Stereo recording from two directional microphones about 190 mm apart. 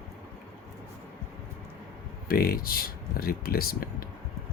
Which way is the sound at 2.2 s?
55° left (ahead or behind).